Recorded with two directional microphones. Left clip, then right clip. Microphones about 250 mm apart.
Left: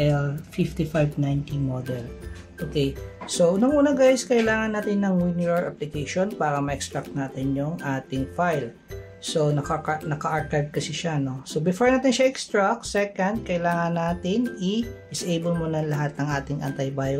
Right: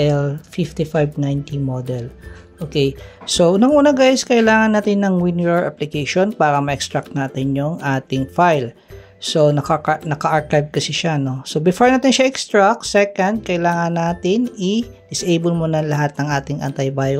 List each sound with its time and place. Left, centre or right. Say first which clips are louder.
0.0 s speech: right 7 dB; right